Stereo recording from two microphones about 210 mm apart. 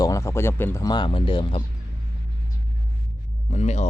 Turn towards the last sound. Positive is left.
turn(degrees=35)  # may be behind; listen again after turning